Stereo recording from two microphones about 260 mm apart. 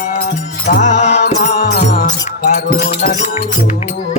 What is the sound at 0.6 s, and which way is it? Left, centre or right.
Music, left.